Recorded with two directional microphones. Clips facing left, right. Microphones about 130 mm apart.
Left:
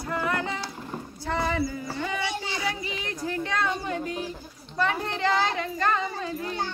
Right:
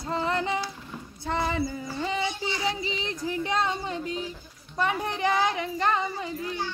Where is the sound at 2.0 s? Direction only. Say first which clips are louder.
Right 2 dB; 25° right (ahead or behind).